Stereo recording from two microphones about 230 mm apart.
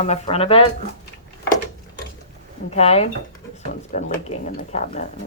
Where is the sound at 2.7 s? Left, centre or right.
Left.